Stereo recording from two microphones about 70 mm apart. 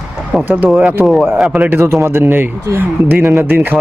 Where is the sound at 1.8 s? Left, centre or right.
Right.